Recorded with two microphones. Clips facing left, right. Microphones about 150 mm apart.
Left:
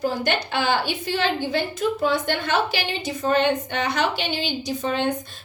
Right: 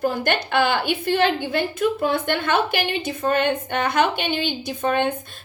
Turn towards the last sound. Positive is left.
turn(degrees=-55)  # may be behind; listen again after turning